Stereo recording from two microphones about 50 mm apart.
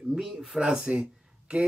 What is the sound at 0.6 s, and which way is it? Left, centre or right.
Speech, centre.